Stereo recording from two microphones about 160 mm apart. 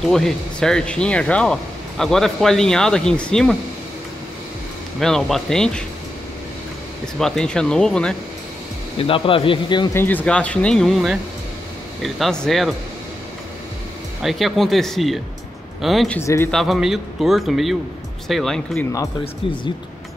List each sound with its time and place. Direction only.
0.0 s speech: centre (ahead or behind)
5.0 s speech: 5° left (ahead or behind)
7.2 s speech: 5° left (ahead or behind)
9.0 s speech: 35° left (ahead or behind)
9.9 s speech: 10° left (ahead or behind)
14.2 s speech: centre (ahead or behind)